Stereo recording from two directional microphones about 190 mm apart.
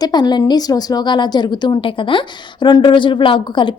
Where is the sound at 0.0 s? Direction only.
20° left (ahead or behind).